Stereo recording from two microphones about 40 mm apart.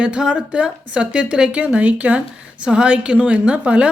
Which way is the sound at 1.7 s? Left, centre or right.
Right.